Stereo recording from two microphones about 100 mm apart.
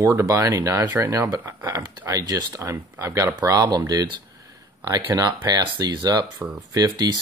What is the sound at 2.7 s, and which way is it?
Speech, 20° right (ahead or behind).